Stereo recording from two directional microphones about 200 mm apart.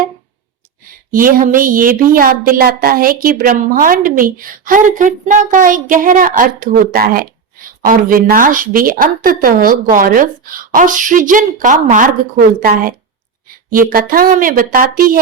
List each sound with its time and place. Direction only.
1.1 s a woman's voice: 45° right (ahead or behind)